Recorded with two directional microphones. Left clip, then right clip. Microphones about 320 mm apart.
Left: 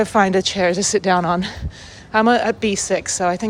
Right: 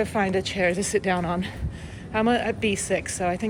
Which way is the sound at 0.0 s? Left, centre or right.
Centre.